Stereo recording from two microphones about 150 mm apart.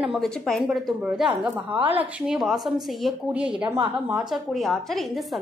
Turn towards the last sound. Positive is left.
turn(degrees=0)  # may be behind; listen again after turning